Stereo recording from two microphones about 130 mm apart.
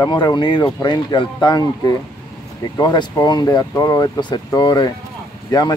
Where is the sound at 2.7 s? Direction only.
35° left (ahead or behind).